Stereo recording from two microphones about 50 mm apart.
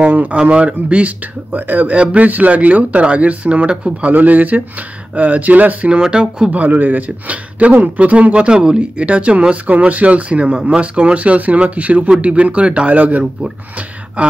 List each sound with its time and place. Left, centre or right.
0.0 s a man's voice: right
4.1 s speech: right
5.9 s speech: centre
6.5 s a man's voice: right